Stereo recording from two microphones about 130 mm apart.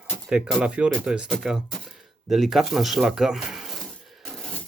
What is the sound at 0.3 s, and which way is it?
Speech, 5° right (ahead or behind).